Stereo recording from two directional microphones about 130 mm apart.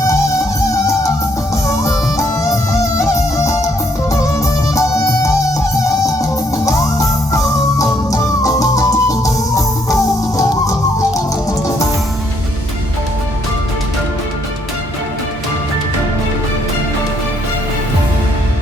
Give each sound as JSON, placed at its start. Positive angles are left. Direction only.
{"t": 0.7, "sound": "music", "side_deg": 25}
{"t": 4.7, "sound": "music", "side_deg": 25}
{"t": 6.7, "sound": "music", "side_deg": 25}